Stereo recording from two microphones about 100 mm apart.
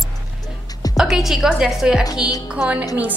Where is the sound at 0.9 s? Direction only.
5° right (ahead or behind).